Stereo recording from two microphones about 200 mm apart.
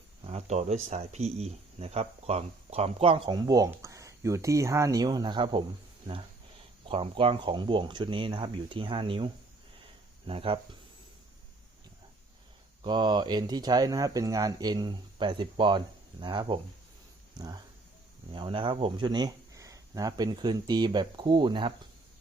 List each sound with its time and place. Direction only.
0.3 s speech: 30° right (ahead or behind)
6.8 s speech: 25° right (ahead or behind)
12.8 s speech: 20° right (ahead or behind)